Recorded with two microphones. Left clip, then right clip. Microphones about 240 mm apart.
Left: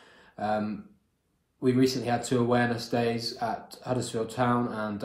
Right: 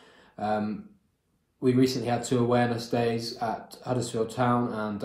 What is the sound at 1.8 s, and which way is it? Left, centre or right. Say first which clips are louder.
Speech: even; centre.